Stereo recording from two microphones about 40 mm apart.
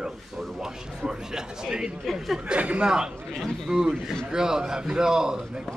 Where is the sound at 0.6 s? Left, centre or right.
Centre.